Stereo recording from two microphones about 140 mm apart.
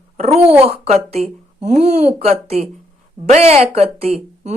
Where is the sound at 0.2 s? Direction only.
50° right (ahead or behind).